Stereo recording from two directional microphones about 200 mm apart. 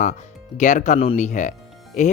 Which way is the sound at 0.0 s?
40° left (ahead or behind).